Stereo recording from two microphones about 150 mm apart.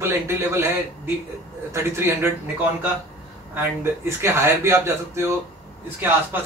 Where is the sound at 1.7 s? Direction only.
20° right (ahead or behind).